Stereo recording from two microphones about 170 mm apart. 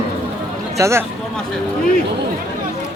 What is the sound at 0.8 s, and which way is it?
Speech, 15° right (ahead or behind).